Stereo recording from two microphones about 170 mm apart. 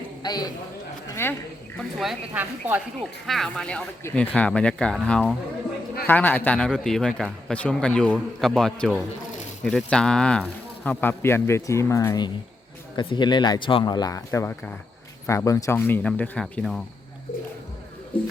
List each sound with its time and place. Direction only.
0.2 s a man's voice: 25° left (ahead or behind)
2.0 s speech: 5° right (ahead or behind)
3.0 s a man's voice: centre (ahead or behind)